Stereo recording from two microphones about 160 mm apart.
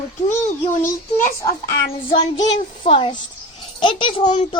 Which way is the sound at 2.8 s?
35° left (ahead or behind).